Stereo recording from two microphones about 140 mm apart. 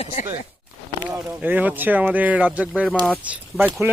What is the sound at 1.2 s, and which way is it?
Speech, 10° right (ahead or behind).